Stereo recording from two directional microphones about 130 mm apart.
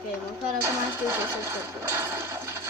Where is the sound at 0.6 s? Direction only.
20° right (ahead or behind).